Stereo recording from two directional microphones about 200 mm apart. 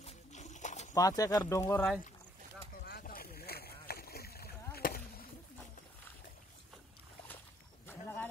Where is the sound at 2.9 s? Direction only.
45° left (ahead or behind).